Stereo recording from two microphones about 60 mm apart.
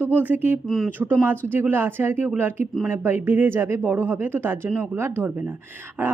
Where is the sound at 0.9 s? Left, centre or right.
Right.